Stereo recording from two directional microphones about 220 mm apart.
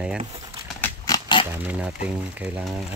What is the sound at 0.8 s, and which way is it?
Pig, 20° left (ahead or behind).